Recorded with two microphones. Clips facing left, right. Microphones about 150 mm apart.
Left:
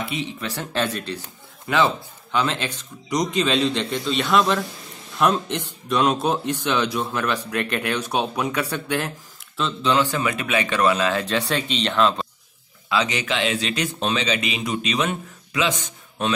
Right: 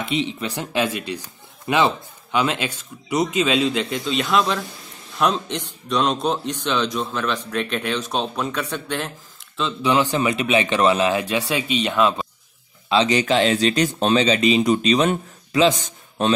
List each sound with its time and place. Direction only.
0.1 s a man's voice: 20° right (ahead or behind); by 9.8 s centre (ahead or behind)
9.8 s speech: 15° right (ahead or behind)
12.9 s speech: 30° right (ahead or behind)